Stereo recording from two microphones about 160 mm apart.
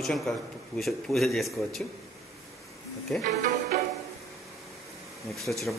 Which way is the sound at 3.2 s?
45° right (ahead or behind).